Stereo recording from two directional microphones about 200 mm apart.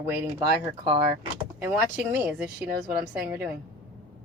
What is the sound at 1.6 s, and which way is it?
A woman's voice, 10° right (ahead or behind).